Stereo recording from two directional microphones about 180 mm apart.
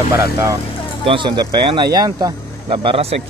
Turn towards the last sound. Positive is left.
turn(degrees=-35)  # may be behind; listen again after turning